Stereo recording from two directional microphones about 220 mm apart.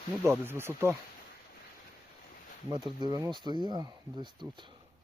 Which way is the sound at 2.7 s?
20° right (ahead or behind).